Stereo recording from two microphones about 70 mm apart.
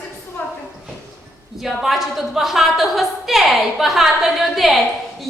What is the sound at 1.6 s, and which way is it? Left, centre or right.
A woman's voice, centre.